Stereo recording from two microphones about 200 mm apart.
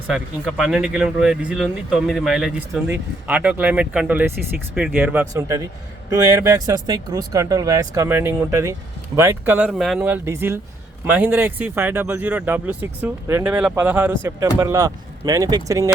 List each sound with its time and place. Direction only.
0.1 s speech: 5° right (ahead or behind)